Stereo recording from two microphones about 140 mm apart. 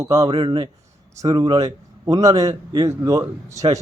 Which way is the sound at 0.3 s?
35° right (ahead or behind).